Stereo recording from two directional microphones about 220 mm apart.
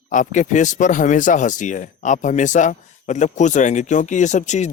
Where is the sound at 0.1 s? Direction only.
35° left (ahead or behind).